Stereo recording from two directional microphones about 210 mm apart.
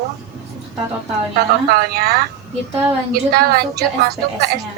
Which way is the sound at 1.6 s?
45° right (ahead or behind).